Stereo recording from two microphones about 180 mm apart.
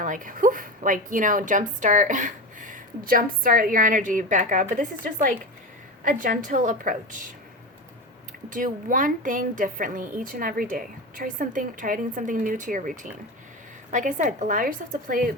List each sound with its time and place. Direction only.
0.0 s a woman's voice: 45° right (ahead or behind)
8.4 s a woman's voice: 45° right (ahead or behind)
13.9 s a woman's voice: 45° right (ahead or behind)